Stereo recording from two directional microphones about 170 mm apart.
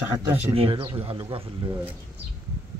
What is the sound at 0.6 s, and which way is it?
Speech, 35° right (ahead or behind).